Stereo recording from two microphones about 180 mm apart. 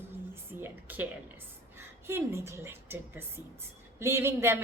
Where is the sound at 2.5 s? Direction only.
15° right (ahead or behind).